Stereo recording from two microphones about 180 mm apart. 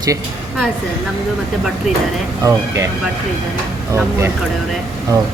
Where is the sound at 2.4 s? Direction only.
15° right (ahead or behind).